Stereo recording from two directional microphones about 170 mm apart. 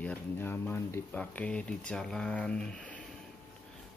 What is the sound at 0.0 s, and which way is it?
Speech, 10° left (ahead or behind).